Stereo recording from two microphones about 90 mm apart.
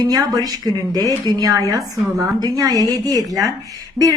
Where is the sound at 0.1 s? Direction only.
45° right (ahead or behind).